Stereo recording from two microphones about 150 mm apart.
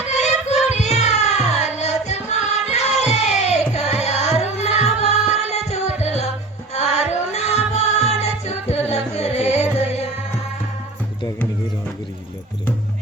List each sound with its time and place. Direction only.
0.2 s child singing: 50° left (ahead or behind)
6.7 s music: 45° left (ahead or behind)